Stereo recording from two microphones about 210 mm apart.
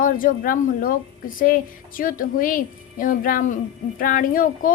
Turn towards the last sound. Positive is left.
turn(degrees=40)  # may be behind; listen again after turning